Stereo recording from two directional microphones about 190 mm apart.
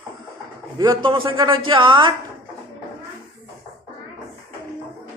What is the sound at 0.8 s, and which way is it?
A man's voice, 25° right (ahead or behind).